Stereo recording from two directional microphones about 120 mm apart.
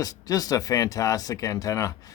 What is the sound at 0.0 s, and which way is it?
Speech, 30° left (ahead or behind).